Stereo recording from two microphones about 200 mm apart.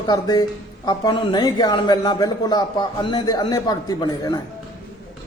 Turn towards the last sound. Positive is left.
turn(degrees=20)  # may be behind; listen again after turning